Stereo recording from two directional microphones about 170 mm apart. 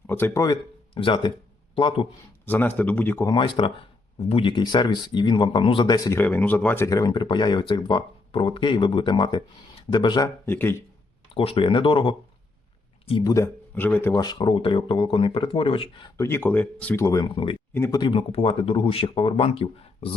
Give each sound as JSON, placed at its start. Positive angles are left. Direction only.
{"t": 0.1, "sound": "speech", "side_deg": 10}
{"t": 2.5, "sound": "speech", "side_deg": 10}
{"t": 3.3, "sound": "speech", "side_deg": 25}
{"t": 6.1, "sound": "speech", "side_deg": 10}
{"t": 11.3, "sound": "speech", "side_deg": 35}
{"t": 13.3, "sound": "speech", "side_deg": 15}
{"t": 14.2, "sound": "speech", "side_deg": 25}
{"t": 16.1, "sound": "speech", "side_deg": 15}
{"t": 17.7, "sound": "speech", "side_deg": 15}
{"t": 18.0, "sound": "speech", "side_deg": 30}